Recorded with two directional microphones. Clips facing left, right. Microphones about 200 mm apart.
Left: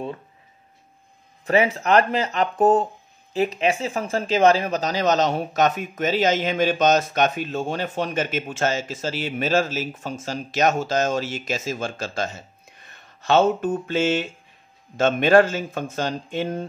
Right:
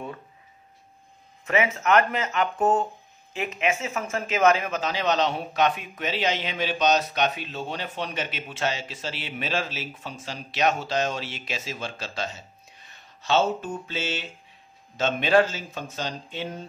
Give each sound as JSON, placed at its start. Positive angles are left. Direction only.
{"t": 1.4, "sound": "speech", "side_deg": 35}